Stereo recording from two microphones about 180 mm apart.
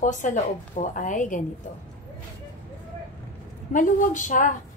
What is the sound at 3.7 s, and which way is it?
Speech, 45° left (ahead or behind).